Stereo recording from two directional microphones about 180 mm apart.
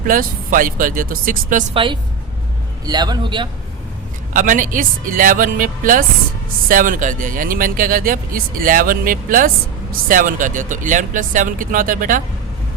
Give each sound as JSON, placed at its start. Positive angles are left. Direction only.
{"t": 0.1, "sound": "speech", "side_deg": -50}
{"t": 1.7, "sound": "a man's voice", "side_deg": -30}
{"t": 4.4, "sound": "speech", "side_deg": -45}